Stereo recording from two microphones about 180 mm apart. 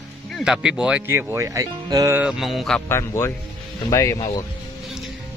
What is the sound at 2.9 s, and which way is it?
Speech, 15° left (ahead or behind).